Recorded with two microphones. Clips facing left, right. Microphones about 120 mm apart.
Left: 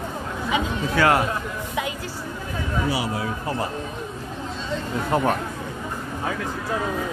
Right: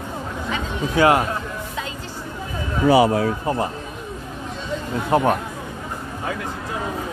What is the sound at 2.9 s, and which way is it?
Speech, 55° right (ahead or behind).